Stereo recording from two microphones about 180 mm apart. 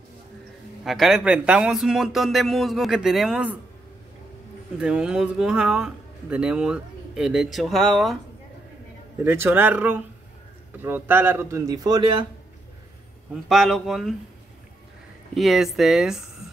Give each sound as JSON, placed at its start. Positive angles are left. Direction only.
{"t": 0.8, "sound": "speech", "side_deg": 0}
{"t": 4.7, "sound": "speech", "side_deg": -5}
{"t": 9.2, "sound": "a man's voice", "side_deg": -10}
{"t": 13.3, "sound": "speech", "side_deg": 0}
{"t": 15.3, "sound": "speech", "side_deg": 0}